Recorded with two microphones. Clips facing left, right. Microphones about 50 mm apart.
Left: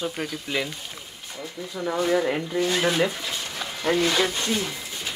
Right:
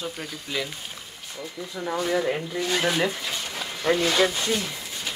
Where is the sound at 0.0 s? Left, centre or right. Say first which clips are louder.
Left 4 dB; centre.